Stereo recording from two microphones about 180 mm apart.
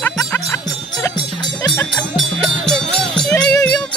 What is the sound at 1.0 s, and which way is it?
Music, 20° left (ahead or behind).